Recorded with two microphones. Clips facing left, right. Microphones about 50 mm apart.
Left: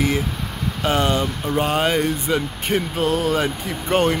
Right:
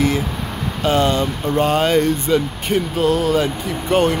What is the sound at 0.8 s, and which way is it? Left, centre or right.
Speech, left.